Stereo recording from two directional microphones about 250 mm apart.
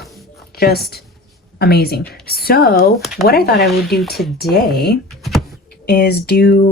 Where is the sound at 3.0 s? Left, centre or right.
Centre.